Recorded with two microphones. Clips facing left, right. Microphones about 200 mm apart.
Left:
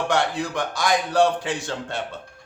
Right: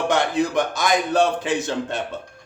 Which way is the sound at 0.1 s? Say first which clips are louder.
Right 5 dB; 20° right (ahead or behind).